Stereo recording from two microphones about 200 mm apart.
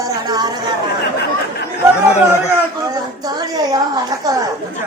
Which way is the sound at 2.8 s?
20° right (ahead or behind).